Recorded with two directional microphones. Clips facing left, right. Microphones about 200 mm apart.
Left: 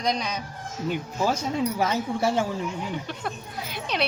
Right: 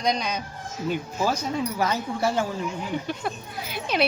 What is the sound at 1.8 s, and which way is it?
Speech, 25° left (ahead or behind).